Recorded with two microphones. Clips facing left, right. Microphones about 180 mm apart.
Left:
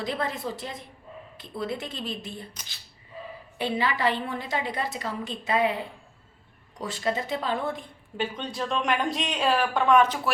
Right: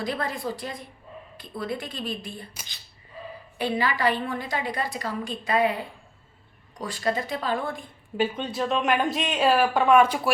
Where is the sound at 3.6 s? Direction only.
25° left (ahead or behind).